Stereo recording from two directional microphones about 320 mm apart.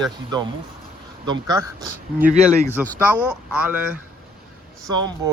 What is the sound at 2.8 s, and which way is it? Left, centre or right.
Speech, centre.